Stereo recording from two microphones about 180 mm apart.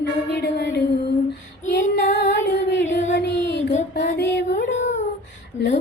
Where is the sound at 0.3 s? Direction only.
65° left (ahead or behind).